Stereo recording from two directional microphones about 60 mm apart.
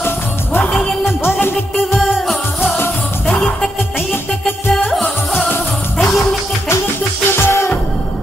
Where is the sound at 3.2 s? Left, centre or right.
Left.